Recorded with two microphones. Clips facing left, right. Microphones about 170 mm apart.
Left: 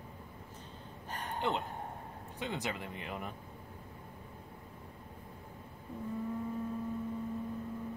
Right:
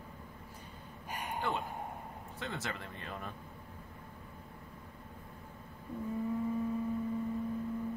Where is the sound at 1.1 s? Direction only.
10° right (ahead or behind).